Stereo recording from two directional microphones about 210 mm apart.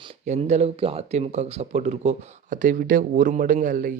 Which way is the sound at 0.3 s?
30° right (ahead or behind).